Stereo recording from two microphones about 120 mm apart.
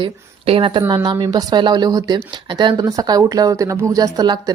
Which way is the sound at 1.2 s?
35° right (ahead or behind).